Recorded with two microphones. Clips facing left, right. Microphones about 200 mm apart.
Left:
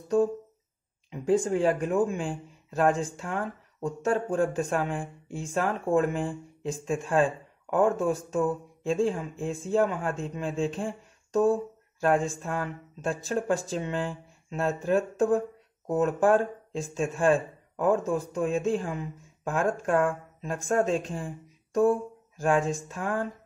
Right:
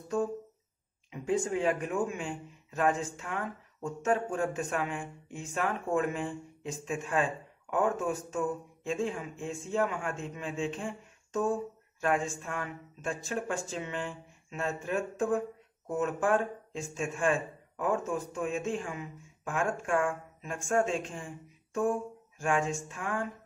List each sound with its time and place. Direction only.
1.1 s speech: 35° left (ahead or behind)